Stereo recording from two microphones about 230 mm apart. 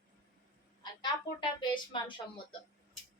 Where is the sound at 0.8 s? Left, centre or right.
Centre.